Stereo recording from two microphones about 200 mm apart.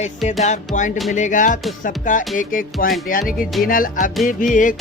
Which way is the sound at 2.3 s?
40° left (ahead or behind).